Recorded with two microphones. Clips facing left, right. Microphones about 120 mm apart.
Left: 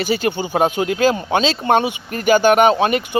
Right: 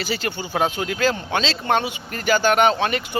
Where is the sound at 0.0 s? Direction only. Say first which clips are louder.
Left 7 dB; 20° left (ahead or behind).